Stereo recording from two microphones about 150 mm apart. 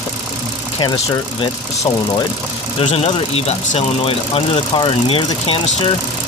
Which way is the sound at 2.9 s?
45° left (ahead or behind).